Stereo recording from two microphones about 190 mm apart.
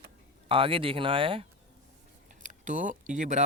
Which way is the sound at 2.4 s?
45° right (ahead or behind).